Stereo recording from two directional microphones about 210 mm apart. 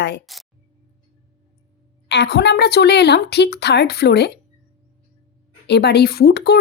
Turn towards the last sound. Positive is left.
turn(degrees=50)  # may be behind; listen again after turning